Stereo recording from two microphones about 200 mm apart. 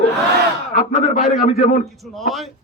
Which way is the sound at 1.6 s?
40° left (ahead or behind).